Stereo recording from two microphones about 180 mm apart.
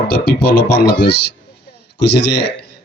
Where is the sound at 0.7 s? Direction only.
70° left (ahead or behind).